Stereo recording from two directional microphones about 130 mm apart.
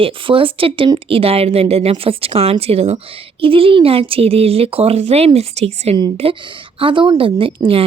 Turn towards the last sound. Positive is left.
turn(degrees=-45)  # may be behind; listen again after turning